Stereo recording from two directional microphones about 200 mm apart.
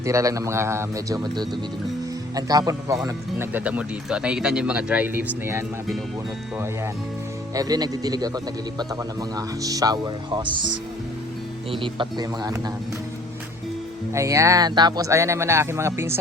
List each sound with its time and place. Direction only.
0.0 s speech: 15° right (ahead or behind)
7.5 s speech: 20° right (ahead or behind)
11.7 s speech: 25° right (ahead or behind)
14.1 s speech: 15° right (ahead or behind)